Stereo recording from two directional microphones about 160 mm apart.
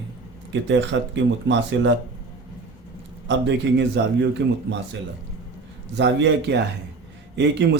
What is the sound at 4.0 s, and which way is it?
Speech, 90° right.